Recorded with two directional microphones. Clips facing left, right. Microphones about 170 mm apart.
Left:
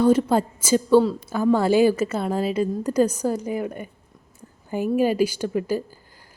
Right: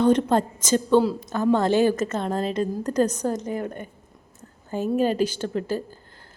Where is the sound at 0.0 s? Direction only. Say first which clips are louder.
Left 1 dB; 5° left (ahead or behind).